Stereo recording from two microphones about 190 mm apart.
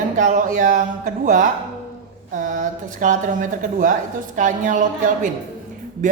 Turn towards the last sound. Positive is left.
turn(degrees=-40)  # may be behind; listen again after turning